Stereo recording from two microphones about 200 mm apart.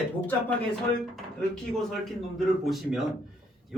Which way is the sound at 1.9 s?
Centre (ahead or behind).